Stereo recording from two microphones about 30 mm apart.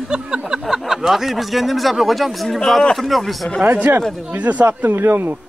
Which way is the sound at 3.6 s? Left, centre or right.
Right.